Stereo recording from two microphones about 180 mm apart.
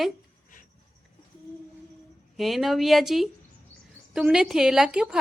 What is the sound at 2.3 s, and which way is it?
A woman's voice, centre (ahead or behind).